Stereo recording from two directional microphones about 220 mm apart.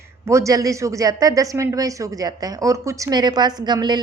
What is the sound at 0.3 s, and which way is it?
Speech, 15° right (ahead or behind).